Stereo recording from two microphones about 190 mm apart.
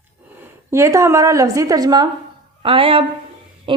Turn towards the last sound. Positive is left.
turn(degrees=-25)  # may be behind; listen again after turning